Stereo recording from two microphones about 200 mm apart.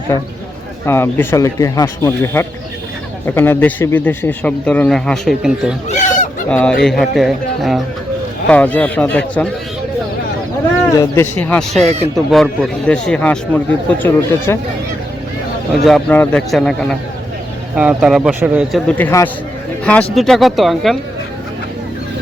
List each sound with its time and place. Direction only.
0.9 s a man's voice: 10° left (ahead or behind); by 5.7 s 5° right (ahead or behind)
5.9 s a sound: 40° left (ahead or behind)
6.5 s a man's voice: 5° left (ahead or behind)
10.9 s a man's voice: 15° left (ahead or behind)
15.8 s speech: 5° left (ahead or behind)
17.7 s speech: 5° right (ahead or behind)
18.9 s a man's voice: 10° left (ahead or behind)